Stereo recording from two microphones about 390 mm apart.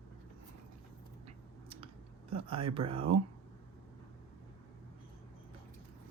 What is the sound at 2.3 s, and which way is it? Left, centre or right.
Speech, centre.